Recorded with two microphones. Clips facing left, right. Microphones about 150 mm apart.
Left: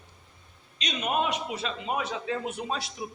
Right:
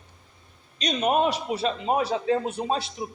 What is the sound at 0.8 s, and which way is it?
A man's voice, 35° right (ahead or behind).